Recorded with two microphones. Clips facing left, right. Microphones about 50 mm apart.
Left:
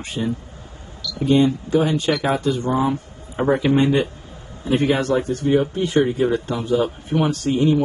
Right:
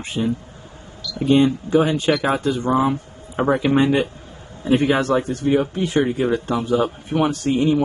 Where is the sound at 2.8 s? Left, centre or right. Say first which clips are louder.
Right 1 dB; right.